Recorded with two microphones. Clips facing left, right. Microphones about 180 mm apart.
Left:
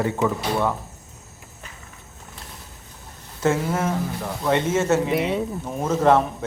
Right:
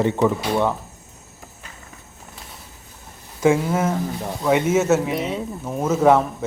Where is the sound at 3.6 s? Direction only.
10° right (ahead or behind).